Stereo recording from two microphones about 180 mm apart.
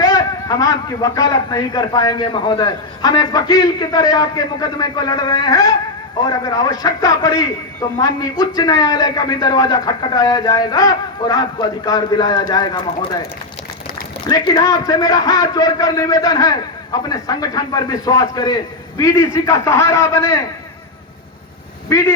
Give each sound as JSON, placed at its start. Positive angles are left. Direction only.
{"t": 0.0, "sound": "a man's voice", "side_deg": 20}
{"t": 14.3, "sound": "a man's voice", "side_deg": 20}